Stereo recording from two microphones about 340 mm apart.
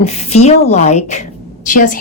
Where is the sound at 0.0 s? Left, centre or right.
Centre.